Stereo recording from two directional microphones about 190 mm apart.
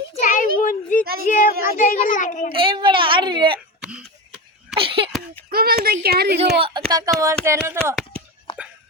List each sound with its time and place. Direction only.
0.2 s a sound: 40° left (ahead or behind)
1.2 s a child's voice: 45° left (ahead or behind)
2.5 s a woman's voice: 25° right (ahead or behind)
4.8 s speech: 30° right (ahead or behind)
5.5 s a woman's voice: 50° right (ahead or behind)
6.6 s a woman's voice: 25° right (ahead or behind)